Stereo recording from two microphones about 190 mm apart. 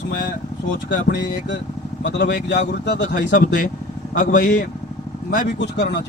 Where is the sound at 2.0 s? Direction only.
65° left (ahead or behind).